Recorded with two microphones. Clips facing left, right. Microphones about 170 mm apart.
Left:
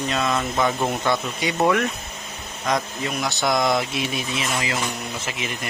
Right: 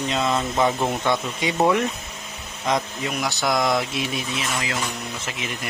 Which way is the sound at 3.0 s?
5° right (ahead or behind).